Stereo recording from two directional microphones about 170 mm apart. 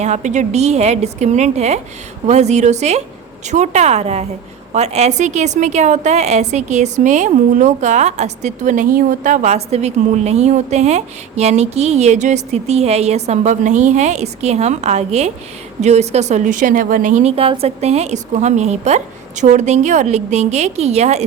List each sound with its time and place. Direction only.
0.0 s a woman's voice: 45° right (ahead or behind)